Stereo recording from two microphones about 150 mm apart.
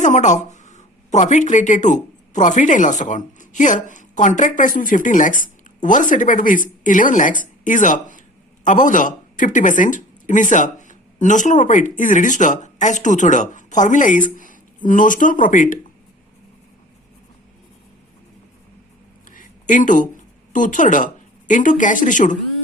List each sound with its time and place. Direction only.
0.0 s a woman's voice: 55° left (ahead or behind)
19.3 s a sound: 60° left (ahead or behind)
20.5 s speech: 60° left (ahead or behind)